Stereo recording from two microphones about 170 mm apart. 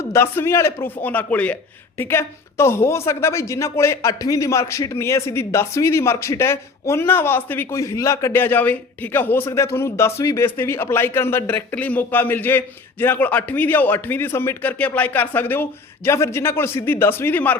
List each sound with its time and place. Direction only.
0.1 s a woman's voice: 15° left (ahead or behind)